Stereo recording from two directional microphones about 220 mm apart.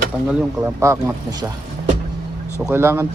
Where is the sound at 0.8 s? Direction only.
15° right (ahead or behind).